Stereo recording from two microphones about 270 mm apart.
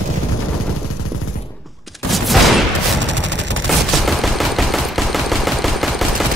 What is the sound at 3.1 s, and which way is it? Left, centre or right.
Gunshot, right.